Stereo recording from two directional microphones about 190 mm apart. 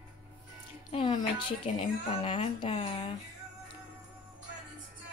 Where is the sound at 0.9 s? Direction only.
25° left (ahead or behind).